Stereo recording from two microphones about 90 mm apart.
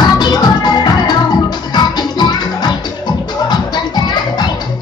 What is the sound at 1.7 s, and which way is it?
Music, 55° left (ahead or behind).